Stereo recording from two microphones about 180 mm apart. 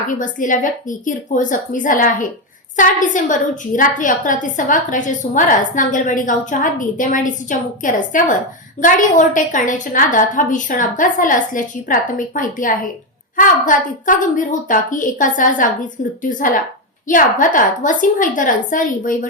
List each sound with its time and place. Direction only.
0.1 s a woman's voice: 45° left (ahead or behind)